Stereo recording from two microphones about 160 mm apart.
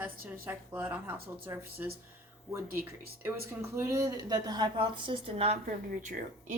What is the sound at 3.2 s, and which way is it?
Speech, 15° right (ahead or behind).